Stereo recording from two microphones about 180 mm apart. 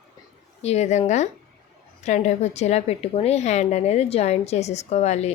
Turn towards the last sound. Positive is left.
turn(degrees=40)  # may be behind; listen again after turning